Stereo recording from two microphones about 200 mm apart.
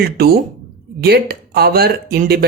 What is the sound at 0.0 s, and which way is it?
Speech, 50° right (ahead or behind).